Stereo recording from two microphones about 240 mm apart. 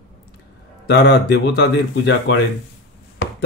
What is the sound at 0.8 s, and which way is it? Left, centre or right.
Speech, left.